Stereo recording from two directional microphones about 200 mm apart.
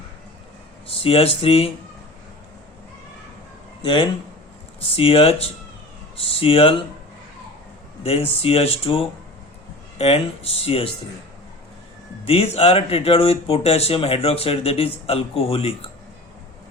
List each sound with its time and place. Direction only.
0.9 s speech: 30° left (ahead or behind)
3.8 s speech: 25° left (ahead or behind)
8.0 s speech: 30° left (ahead or behind)
12.2 s speech: 30° left (ahead or behind)